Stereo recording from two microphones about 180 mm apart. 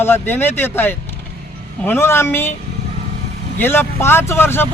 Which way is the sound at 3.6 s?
10° left (ahead or behind).